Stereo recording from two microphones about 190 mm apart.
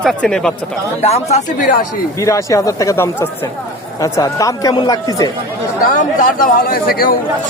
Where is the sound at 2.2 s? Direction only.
15° left (ahead or behind).